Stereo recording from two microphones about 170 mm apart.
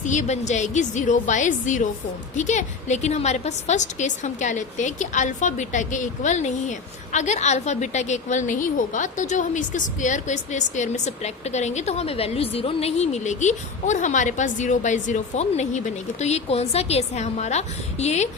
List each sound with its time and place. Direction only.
0.0 s a woman's voice: 45° left (ahead or behind)